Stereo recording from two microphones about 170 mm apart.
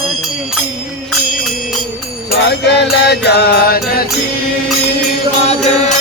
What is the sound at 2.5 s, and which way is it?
Music, 80° left.